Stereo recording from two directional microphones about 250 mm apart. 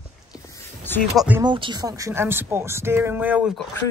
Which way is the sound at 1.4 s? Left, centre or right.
Centre.